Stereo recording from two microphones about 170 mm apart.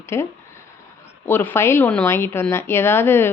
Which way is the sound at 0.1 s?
15° left (ahead or behind).